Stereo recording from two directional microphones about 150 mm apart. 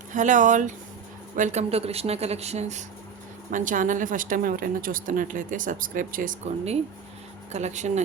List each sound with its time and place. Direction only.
0.1 s a woman's voice: 60° right (ahead or behind)
3.5 s a woman's voice: 60° right (ahead or behind)
7.5 s speech: 50° right (ahead or behind)